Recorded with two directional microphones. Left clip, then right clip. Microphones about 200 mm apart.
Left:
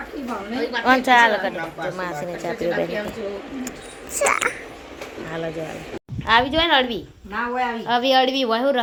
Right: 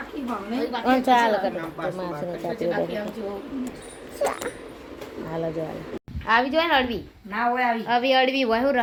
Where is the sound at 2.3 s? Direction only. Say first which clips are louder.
Left 2 dB; centre (ahead or behind).